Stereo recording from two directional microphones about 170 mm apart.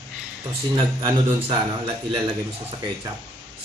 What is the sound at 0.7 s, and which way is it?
A man's voice, 25° right (ahead or behind).